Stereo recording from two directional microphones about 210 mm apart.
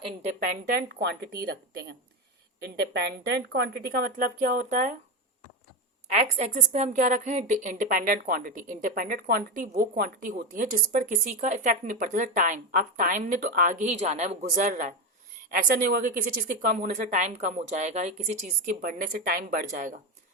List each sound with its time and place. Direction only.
0.0 s speech: 35° right (ahead or behind); by 1.5 s 50° right (ahead or behind)
2.6 s speech: 50° right (ahead or behind); by 4.9 s 35° right (ahead or behind)
6.1 s a woman's voice: 35° right (ahead or behind)